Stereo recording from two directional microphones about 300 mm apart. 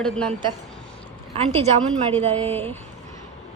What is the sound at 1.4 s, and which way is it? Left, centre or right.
A woman's voice, centre.